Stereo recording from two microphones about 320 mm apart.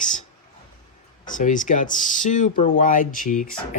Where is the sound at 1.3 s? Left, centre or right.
Left.